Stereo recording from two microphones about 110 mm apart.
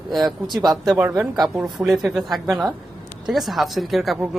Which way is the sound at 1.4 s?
5° right (ahead or behind).